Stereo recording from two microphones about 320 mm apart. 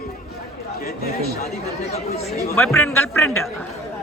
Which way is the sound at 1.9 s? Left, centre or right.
Centre.